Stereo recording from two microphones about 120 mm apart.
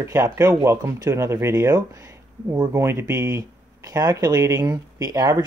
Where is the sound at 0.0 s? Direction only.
25° right (ahead or behind).